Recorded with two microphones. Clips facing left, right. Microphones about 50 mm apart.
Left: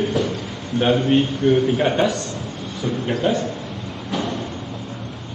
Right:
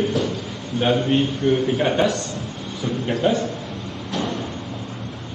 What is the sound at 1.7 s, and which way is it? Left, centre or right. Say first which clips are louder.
Speech: left 1 dB; left.